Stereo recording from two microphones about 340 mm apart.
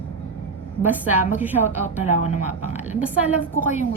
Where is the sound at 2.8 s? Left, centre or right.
Centre.